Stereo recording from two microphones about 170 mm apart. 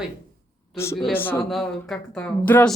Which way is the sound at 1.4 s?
Centre (ahead or behind).